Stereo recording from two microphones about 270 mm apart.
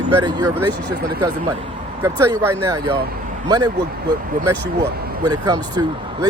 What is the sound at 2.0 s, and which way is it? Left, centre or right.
Speech, centre.